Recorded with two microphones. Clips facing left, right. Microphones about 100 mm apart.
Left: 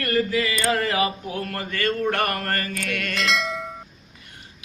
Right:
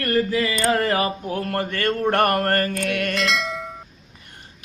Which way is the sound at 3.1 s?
Centre (ahead or behind).